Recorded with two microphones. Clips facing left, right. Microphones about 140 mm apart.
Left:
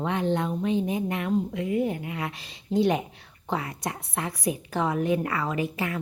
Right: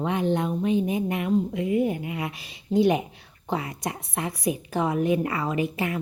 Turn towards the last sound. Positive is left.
turn(degrees=-20)  # may be behind; listen again after turning